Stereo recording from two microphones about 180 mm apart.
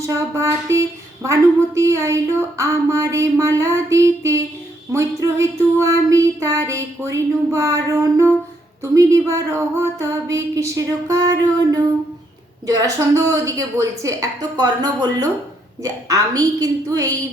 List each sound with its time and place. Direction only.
0.0 s a woman's voice: 15° right (ahead or behind)